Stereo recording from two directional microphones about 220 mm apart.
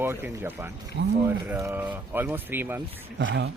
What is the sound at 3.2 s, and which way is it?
Speech, 50° right (ahead or behind).